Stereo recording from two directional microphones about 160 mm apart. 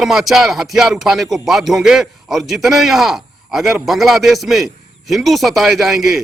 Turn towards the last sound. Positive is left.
turn(degrees=0)  # may be behind; listen again after turning